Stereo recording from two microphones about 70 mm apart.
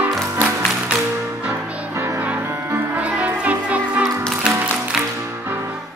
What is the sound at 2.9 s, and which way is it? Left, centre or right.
Music, right.